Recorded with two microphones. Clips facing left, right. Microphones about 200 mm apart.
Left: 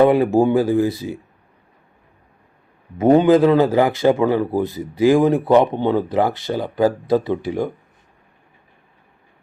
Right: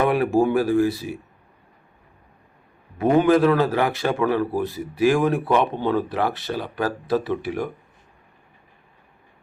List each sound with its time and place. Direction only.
0.0 s a man's voice: 20° left (ahead or behind)
3.2 s a man's voice: 20° left (ahead or behind)